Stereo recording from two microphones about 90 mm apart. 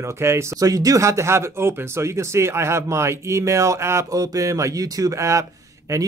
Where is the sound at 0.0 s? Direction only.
30° right (ahead or behind).